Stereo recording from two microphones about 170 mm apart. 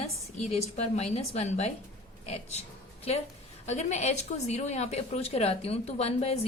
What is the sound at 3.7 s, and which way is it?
A woman's voice, 40° left (ahead or behind).